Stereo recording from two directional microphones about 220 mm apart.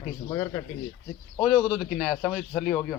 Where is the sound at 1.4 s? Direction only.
5° right (ahead or behind).